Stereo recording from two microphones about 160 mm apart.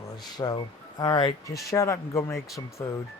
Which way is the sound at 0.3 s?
25° left (ahead or behind).